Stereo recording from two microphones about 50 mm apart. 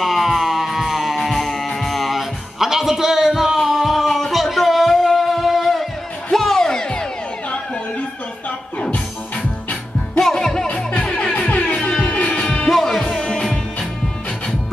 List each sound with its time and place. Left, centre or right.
0.0 s music: centre
8.9 s music: left
10.2 s music: centre
10.9 s music: left
12.6 s music: centre